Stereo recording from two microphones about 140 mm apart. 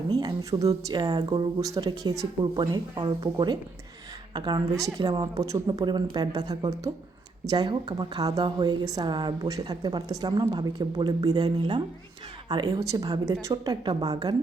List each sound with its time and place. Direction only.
0.1 s a woman's voice: 30° right (ahead or behind)